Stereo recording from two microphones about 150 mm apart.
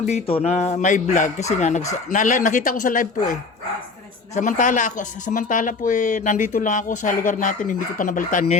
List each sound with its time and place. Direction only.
0.1 s speech: 45° left (ahead or behind); by 3.3 s 65° left (ahead or behind)
4.4 s speech: 55° left (ahead or behind)